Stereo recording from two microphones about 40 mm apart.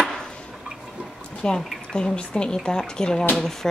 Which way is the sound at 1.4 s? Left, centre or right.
Centre.